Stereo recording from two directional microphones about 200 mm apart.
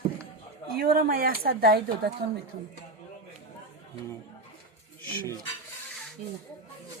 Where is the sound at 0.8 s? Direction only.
50° right (ahead or behind).